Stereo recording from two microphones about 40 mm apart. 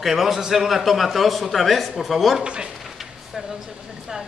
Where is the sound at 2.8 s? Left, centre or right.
Centre.